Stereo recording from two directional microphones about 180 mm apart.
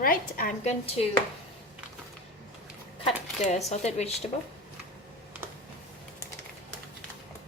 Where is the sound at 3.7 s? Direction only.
40° left (ahead or behind).